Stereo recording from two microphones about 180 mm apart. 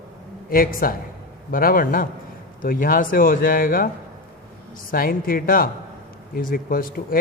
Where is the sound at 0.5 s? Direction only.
55° left (ahead or behind).